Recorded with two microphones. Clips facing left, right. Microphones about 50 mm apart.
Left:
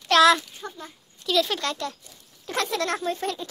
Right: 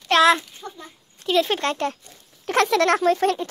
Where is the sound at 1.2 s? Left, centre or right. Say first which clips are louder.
Right 4 dB; right.